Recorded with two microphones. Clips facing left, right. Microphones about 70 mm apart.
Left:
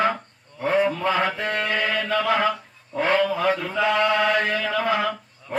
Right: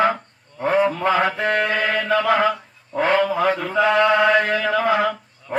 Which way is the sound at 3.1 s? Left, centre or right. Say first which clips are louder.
Right 2 dB; right.